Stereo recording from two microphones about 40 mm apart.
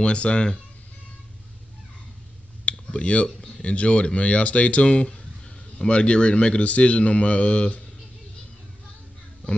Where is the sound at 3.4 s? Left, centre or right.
Left.